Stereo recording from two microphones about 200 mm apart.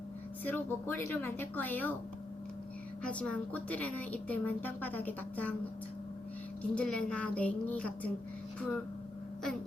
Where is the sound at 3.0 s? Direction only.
5° left (ahead or behind).